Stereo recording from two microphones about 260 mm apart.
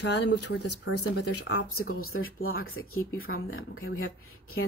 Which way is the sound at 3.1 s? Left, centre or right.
Left.